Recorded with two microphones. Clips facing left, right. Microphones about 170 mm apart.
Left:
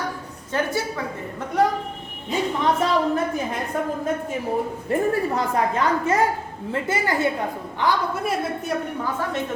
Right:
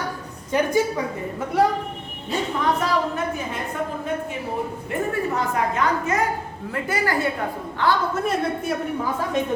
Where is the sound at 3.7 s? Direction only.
40° left (ahead or behind).